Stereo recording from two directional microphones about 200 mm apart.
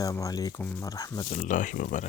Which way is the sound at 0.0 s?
15° left (ahead or behind).